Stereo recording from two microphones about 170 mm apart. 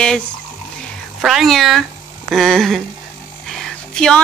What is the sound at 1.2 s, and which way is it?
Speech, centre (ahead or behind).